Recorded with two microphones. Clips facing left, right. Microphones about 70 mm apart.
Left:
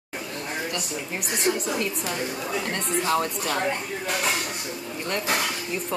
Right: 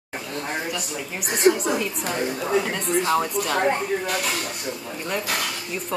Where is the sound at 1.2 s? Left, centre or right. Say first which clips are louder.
Right 9 dB; right.